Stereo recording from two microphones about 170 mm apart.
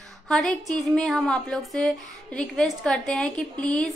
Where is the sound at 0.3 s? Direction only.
Centre (ahead or behind).